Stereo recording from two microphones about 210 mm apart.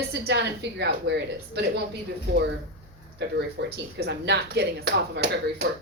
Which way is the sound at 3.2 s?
55° right (ahead or behind).